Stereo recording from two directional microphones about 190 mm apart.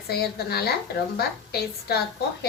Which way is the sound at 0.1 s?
55° left (ahead or behind).